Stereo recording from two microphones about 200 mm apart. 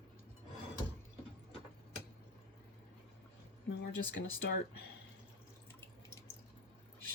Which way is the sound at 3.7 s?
55° left (ahead or behind).